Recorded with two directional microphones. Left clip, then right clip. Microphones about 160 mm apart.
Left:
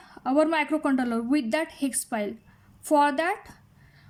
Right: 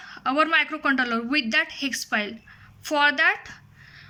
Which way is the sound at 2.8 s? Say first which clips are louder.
Right 2 dB; 30° left (ahead or behind).